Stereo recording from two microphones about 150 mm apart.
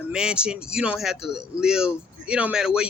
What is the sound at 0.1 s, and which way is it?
Speech, 5° right (ahead or behind).